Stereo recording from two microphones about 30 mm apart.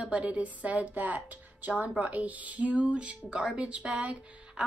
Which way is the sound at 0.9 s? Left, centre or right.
Right.